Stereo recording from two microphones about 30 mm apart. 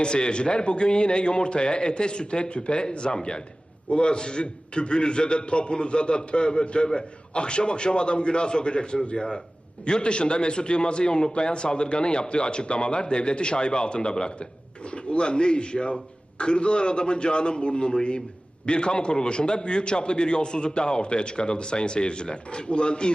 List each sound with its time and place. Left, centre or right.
0.0 s a man's voice: left